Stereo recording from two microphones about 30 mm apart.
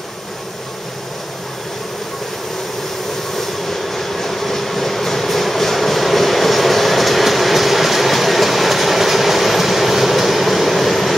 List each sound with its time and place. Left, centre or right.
3.3 s train: centre